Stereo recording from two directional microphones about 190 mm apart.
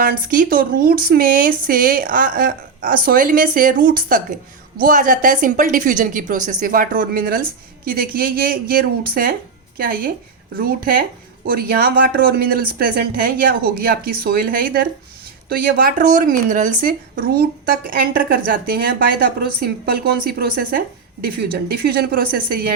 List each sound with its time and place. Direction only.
0.0 s a woman's voice: 50° right (ahead or behind)